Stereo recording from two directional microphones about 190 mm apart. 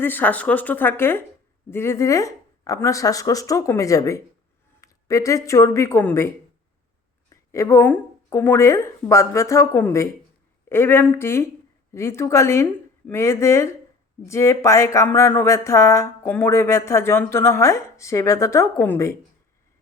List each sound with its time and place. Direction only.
0.0 s speech: 10° left (ahead or behind)
7.5 s speech: 15° left (ahead or behind)